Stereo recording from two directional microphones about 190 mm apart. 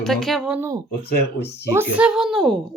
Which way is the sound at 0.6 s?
15° right (ahead or behind).